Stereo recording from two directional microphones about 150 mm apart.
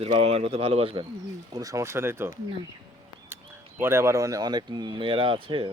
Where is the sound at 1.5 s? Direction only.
20° right (ahead or behind).